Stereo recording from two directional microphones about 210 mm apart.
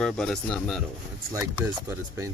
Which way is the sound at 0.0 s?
Centre (ahead or behind).